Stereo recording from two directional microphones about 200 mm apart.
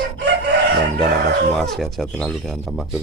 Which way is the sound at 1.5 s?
Centre (ahead or behind).